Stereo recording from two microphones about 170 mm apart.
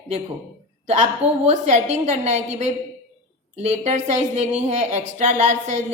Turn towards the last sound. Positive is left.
turn(degrees=-45)  # may be behind; listen again after turning